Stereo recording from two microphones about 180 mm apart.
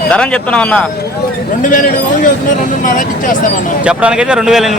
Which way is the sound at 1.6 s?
45° left (ahead or behind).